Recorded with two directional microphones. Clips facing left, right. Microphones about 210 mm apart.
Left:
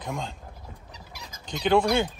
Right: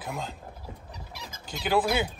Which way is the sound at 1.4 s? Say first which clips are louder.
Left 4 dB; 5° right (ahead or behind).